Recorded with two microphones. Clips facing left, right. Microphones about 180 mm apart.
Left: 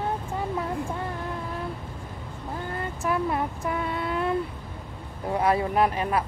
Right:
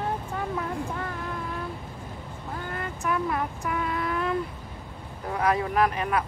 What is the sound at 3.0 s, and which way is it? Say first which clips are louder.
Vehicle: left 2 dB; 25° left (ahead or behind).